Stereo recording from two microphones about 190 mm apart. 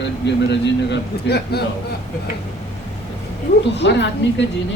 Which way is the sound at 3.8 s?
65° left (ahead or behind).